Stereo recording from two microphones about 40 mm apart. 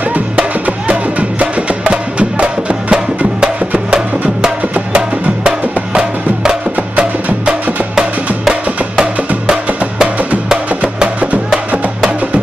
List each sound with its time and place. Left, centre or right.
1.4 s music: right
10.8 s music: right